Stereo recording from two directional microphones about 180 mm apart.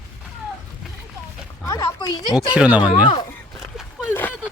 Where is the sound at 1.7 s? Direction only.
15° left (ahead or behind).